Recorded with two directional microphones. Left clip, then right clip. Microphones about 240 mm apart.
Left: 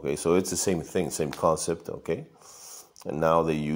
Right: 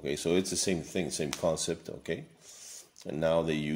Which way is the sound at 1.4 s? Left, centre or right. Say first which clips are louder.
Left 7 dB; centre.